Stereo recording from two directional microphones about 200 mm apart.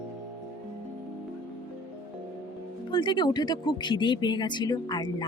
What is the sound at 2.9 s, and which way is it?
Speech, 25° left (ahead or behind).